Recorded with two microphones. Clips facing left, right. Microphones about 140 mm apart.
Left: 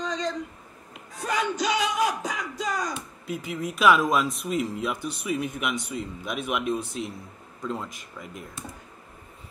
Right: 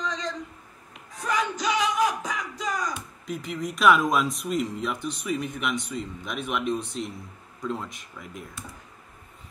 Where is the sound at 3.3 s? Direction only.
5° left (ahead or behind).